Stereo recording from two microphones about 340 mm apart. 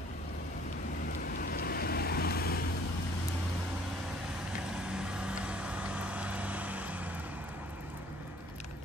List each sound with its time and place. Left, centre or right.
1.4 s vehicle: left
4.9 s vehicle: centre